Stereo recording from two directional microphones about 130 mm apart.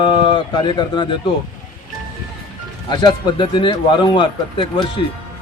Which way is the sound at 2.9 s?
35° left (ahead or behind).